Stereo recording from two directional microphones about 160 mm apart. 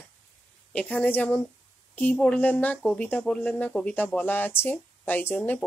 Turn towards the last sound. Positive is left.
turn(degrees=10)  # may be behind; listen again after turning